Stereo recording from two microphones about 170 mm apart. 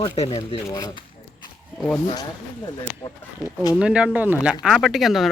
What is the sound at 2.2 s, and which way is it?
Speech, 25° left (ahead or behind).